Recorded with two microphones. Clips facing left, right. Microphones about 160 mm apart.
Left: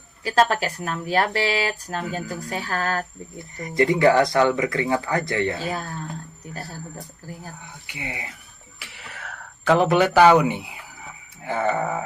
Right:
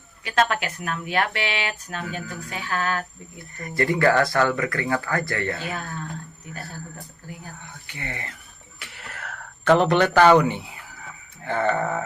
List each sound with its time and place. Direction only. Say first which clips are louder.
0.3 s speech: left 3 dB; 35° left (ahead or behind)
3.6 s speech: left 3 dB; 20° left (ahead or behind)
5.5 s speech: left 3 dB; 35° left (ahead or behind)
7.9 s a sound: left 1 dB; 10° left (ahead or behind)